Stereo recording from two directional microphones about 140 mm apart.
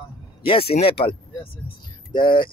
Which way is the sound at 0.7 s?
40° left (ahead or behind).